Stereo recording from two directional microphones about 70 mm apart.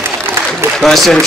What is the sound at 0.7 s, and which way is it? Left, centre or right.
Speech, centre.